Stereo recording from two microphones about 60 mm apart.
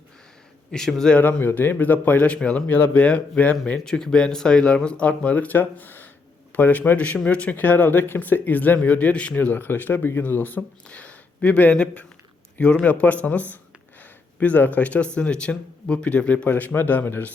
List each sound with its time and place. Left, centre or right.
0.7 s speech: centre
1.2 s a man's voice: left
3.8 s a man's voice: centre; by 17.3 s left